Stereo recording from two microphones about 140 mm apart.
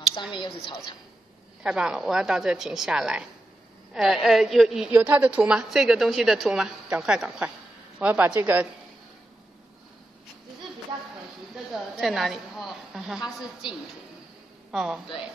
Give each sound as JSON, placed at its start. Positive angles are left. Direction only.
{"t": 0.1, "sound": "a woman's voice", "side_deg": 35}
{"t": 1.6, "sound": "a woman's voice", "side_deg": -5}
{"t": 11.5, "sound": "a woman's voice", "side_deg": -5}